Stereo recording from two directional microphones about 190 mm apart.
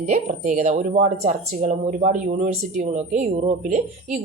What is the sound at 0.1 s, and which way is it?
Speech, 40° right (ahead or behind).